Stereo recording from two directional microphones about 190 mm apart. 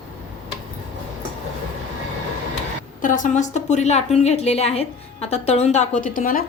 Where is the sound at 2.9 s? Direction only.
45° left (ahead or behind).